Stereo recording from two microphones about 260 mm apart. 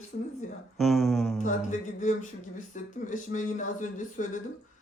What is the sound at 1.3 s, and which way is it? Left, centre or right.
Speech, left.